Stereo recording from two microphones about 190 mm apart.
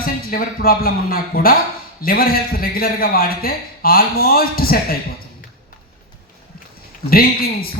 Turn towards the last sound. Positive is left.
turn(degrees=50)  # may be behind; listen again after turning